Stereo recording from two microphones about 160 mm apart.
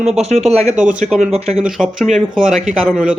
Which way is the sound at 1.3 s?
40° right (ahead or behind).